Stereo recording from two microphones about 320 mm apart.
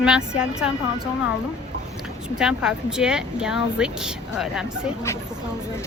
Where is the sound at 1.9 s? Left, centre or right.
Centre.